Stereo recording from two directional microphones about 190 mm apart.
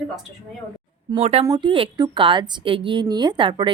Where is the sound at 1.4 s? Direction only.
20° right (ahead or behind).